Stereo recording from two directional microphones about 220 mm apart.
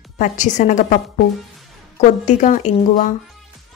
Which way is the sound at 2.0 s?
35° left (ahead or behind).